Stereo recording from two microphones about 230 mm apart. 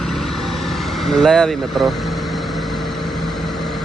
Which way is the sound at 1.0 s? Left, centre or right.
Centre.